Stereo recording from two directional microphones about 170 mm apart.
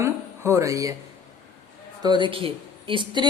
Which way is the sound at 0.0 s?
15° right (ahead or behind).